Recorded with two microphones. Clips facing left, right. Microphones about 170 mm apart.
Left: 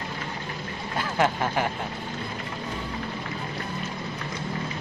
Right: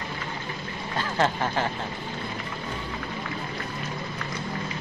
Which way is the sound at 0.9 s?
10° left (ahead or behind).